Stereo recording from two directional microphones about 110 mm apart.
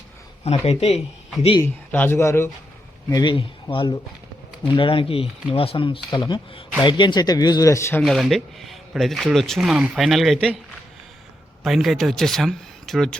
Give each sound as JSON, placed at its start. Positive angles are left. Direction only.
{"t": 0.4, "sound": "speech", "side_deg": 75}
{"t": 1.6, "sound": "speech", "side_deg": 20}
{"t": 3.1, "sound": "speech", "side_deg": 40}
{"t": 8.0, "sound": "speech", "side_deg": 0}
{"t": 11.6, "sound": "speech", "side_deg": 0}